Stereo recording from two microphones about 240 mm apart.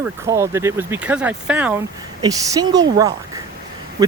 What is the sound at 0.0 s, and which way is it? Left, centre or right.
Speech, centre.